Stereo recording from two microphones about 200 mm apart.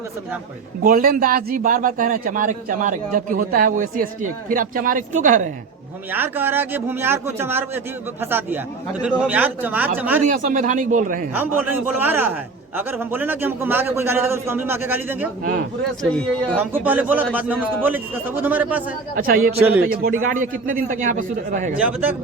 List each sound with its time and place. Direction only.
0.9 s a man's voice: 45° right (ahead or behind)
6.1 s a man's voice: 10° right (ahead or behind)
10.2 s a man's voice: 40° right (ahead or behind)
11.3 s a man's voice: 10° right (ahead or behind)
16.1 s speech: 5° left (ahead or behind)
16.6 s a man's voice: 10° right (ahead or behind)
19.1 s a man's voice: 45° right (ahead or behind)
19.5 s a man's voice: 10° right (ahead or behind)
19.9 s a man's voice: 45° right (ahead or behind)
21.8 s a man's voice: 5° right (ahead or behind)